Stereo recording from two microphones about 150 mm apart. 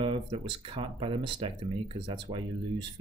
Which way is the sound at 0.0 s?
35° right (ahead or behind).